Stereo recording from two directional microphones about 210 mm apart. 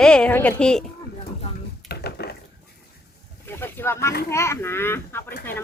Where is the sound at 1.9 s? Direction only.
50° left (ahead or behind).